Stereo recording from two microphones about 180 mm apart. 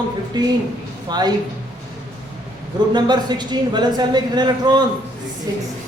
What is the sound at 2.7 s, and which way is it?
A woman's voice, 25° right (ahead or behind).